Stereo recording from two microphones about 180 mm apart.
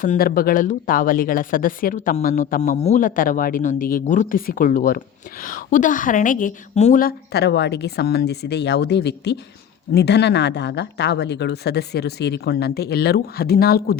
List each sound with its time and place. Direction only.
0.0 s speech: 50° left (ahead or behind)